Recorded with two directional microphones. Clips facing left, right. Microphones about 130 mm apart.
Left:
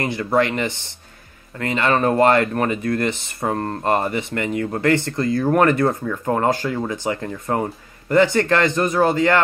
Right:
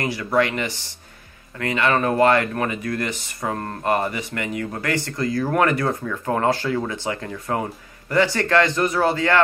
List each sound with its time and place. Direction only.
0.0 s speech: 25° left (ahead or behind)